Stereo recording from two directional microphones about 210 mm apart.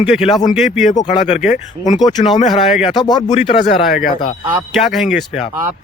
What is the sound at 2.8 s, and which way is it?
Speech, 20° left (ahead or behind).